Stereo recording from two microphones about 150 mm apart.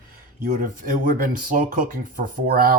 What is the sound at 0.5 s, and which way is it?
Speech, 65° right (ahead or behind).